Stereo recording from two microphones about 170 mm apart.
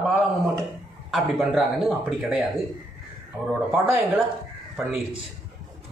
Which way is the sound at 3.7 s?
10° right (ahead or behind).